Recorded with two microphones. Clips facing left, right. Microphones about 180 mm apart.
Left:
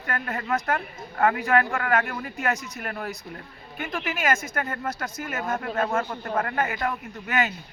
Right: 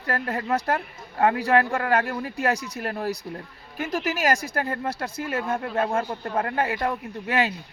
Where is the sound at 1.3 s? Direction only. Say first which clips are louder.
Right 2 dB; 35° right (ahead or behind).